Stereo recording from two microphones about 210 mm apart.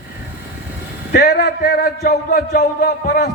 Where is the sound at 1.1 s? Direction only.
50° left (ahead or behind).